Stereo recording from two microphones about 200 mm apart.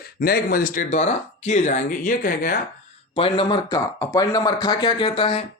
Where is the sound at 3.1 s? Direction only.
25° left (ahead or behind).